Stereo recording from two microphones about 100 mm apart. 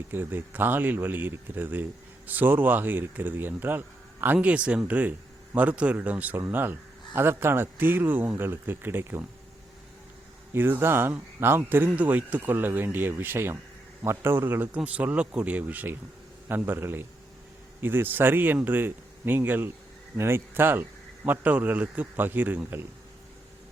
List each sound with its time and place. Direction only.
0.1 s speech: 20° right (ahead or behind)
10.5 s speech: 25° right (ahead or behind)